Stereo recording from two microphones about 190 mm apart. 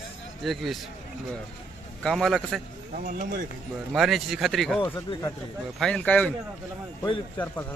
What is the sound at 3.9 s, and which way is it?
Speech, centre (ahead or behind).